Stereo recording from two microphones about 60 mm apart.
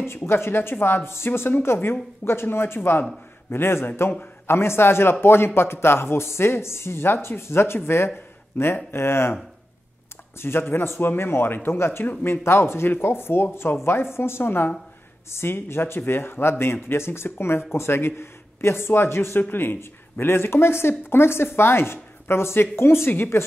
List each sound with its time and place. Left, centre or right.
0.0 s a woman's voice: left
10.4 s a woman's voice: left